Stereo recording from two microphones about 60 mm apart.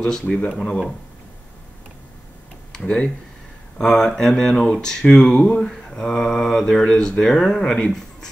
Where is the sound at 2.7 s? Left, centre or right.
Centre.